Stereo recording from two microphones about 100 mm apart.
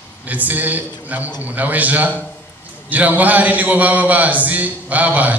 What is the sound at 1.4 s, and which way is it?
A man's voice, 15° right (ahead or behind).